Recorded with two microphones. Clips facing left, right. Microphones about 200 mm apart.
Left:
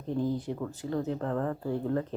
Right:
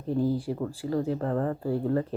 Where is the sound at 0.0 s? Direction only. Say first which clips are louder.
Right 4 dB; 5° right (ahead or behind).